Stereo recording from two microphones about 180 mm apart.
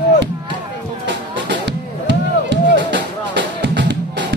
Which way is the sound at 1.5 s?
80° right.